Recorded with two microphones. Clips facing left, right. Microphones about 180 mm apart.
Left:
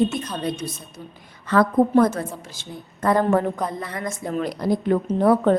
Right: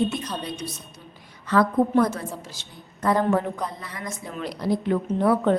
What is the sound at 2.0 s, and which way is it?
A woman's voice, 50° left (ahead or behind).